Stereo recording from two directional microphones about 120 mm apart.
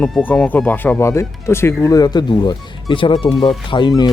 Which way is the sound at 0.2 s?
15° left (ahead or behind).